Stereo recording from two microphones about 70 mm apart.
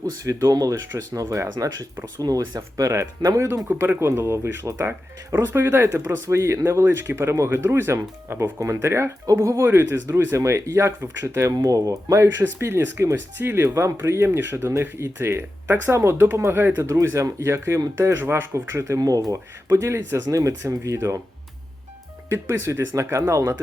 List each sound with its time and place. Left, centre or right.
0.3 s speech: right
2.2 s speech: right
2.6 s speech: right
6.8 s speech: right
11.5 s speech: right
16.8 s speech: right
18.9 s speech: right
19.7 s speech: right
22.3 s speech: right